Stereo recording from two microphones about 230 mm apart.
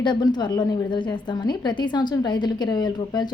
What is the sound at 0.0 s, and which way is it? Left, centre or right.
A woman's voice, centre.